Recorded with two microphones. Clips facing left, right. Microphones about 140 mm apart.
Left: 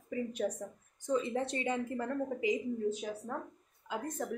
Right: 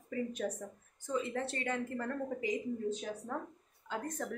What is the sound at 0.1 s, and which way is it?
A woman's voice, 15° left (ahead or behind).